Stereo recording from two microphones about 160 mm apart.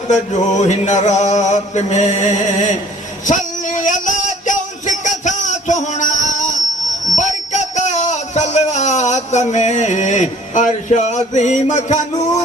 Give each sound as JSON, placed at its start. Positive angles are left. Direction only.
{"t": 0.1, "sound": "mantra", "side_deg": 45}
{"t": 3.2, "sound": "music", "side_deg": 55}
{"t": 7.2, "sound": "a sound", "side_deg": 50}